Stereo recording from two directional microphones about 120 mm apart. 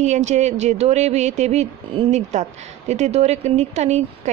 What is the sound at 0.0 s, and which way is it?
Speech, 75° right (ahead or behind).